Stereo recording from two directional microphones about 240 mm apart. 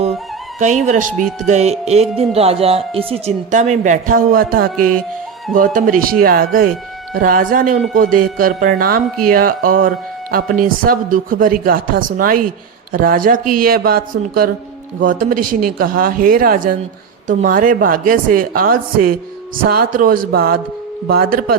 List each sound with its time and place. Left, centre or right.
0.6 s speech: right
15.0 s speech: right